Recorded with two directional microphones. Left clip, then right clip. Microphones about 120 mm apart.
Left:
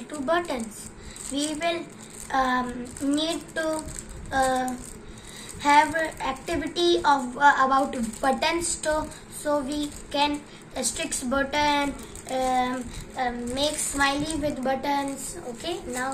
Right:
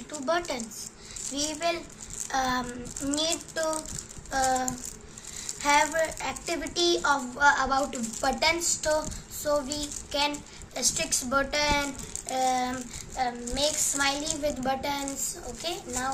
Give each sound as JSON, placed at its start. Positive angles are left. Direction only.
{"t": 1.3, "sound": "a child's voice", "side_deg": -15}
{"t": 2.2, "sound": "a sound", "side_deg": -20}
{"t": 3.1, "sound": "a child's voice", "side_deg": -15}
{"t": 13.2, "sound": "a child's voice", "side_deg": -10}